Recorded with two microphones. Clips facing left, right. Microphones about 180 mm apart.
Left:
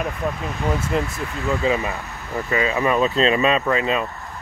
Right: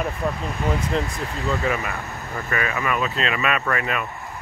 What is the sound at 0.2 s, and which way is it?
Speech, 5° left (ahead or behind).